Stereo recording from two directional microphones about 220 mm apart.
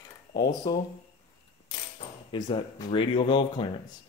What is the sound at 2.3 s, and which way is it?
Speech, 20° left (ahead or behind).